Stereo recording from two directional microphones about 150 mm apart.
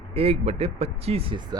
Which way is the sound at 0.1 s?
40° right (ahead or behind).